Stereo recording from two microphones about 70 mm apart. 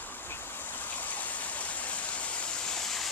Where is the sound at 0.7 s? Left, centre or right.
Left.